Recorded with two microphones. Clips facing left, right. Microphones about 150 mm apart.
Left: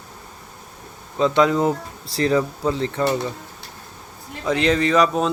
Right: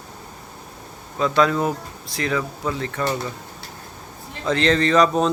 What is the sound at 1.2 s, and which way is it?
Speech, 20° left (ahead or behind).